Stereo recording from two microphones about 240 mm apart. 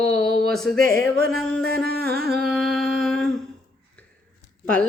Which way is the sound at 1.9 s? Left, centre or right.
Right.